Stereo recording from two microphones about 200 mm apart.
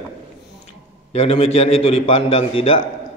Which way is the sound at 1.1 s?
30° left (ahead or behind).